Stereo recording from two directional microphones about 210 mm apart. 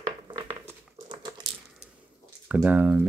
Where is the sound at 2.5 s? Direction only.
10° right (ahead or behind).